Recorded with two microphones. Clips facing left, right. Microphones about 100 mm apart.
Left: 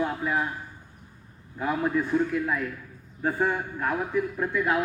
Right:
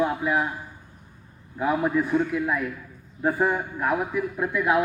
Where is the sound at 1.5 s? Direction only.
10° right (ahead or behind).